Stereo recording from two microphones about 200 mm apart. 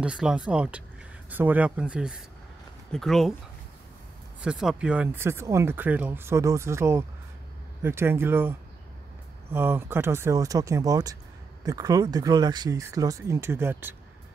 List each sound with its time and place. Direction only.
0.0 s speech: 5° right (ahead or behind)
4.4 s speech: 5° right (ahead or behind)